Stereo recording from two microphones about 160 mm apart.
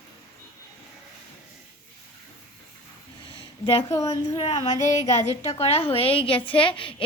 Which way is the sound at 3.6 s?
35° left (ahead or behind).